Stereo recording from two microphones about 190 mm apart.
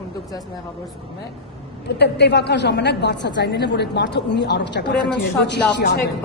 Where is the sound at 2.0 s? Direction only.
60° left (ahead or behind).